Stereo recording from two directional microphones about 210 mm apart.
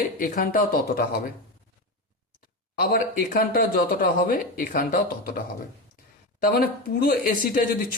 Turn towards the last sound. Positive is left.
turn(degrees=40)  # may be behind; listen again after turning